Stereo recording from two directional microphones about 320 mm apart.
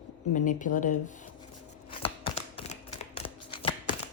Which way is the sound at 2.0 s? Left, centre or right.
Centre.